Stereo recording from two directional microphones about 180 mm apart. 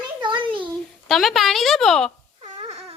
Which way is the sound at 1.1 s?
Centre (ahead or behind).